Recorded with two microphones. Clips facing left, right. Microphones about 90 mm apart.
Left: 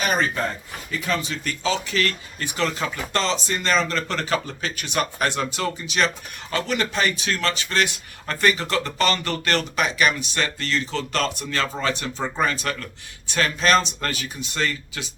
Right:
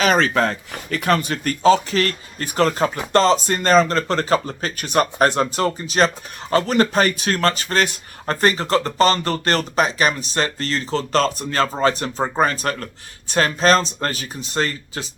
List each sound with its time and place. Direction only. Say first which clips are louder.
0.0 s speech: right 6 dB; 90° right; by 15.1 s 35° right (ahead or behind)